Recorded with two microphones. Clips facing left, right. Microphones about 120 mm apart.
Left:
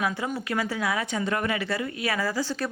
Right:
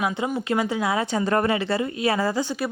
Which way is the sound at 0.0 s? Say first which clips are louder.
Right 3 dB; 20° right (ahead or behind).